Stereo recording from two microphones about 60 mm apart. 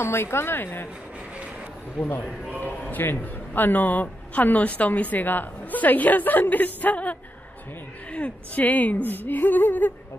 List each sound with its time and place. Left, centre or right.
0.0 s speech: left
2.0 s a man's voice: left